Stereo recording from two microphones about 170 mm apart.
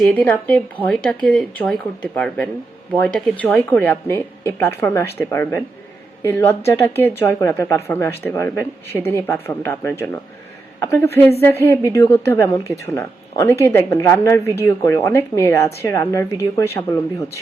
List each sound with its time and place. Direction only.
0.1 s speech: 10° left (ahead or behind)
11.1 s speech: 15° left (ahead or behind)